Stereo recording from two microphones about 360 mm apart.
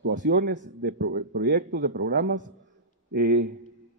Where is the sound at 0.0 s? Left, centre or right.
Right.